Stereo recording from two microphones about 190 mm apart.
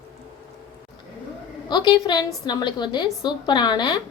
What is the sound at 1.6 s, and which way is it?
A woman's voice, 20° left (ahead or behind).